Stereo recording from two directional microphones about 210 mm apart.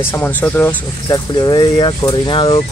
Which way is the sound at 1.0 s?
20° left (ahead or behind).